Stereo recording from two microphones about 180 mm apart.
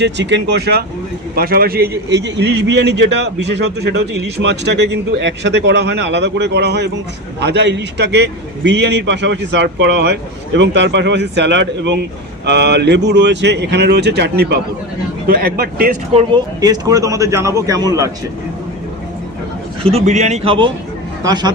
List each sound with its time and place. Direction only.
0.0 s a man's voice: 75° right (ahead or behind); by 1.9 s 55° right (ahead or behind)
2.0 s a man's voice: 75° right (ahead or behind); by 15.9 s 60° right (ahead or behind)
16.1 s speech: 25° right (ahead or behind)
19.8 s a man's voice: 35° right (ahead or behind)